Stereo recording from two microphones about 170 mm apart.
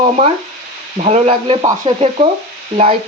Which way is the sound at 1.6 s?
25° right (ahead or behind).